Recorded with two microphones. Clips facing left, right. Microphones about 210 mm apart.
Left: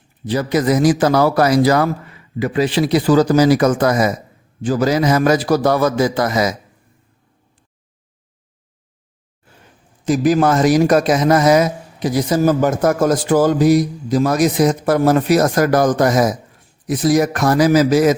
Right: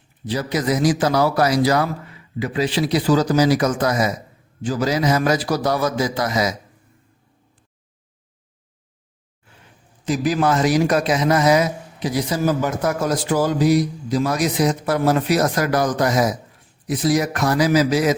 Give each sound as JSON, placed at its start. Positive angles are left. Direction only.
{"t": 0.3, "sound": "a man's voice", "side_deg": 55}
{"t": 10.1, "sound": "a man's voice", "side_deg": 45}